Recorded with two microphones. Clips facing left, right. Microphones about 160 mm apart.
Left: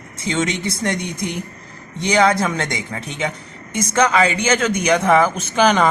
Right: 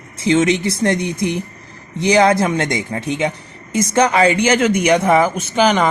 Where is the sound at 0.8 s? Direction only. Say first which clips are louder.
Right 5 dB; 25° right (ahead or behind).